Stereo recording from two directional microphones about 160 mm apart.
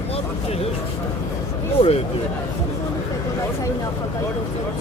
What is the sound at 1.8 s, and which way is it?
Speech, 35° left (ahead or behind).